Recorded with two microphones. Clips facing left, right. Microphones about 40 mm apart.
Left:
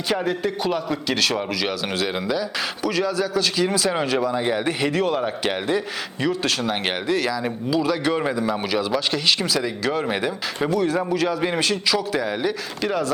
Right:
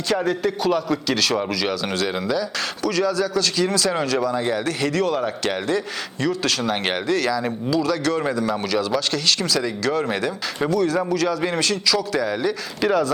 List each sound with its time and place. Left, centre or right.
0.2 s a man's voice: centre
12.8 s speech: centre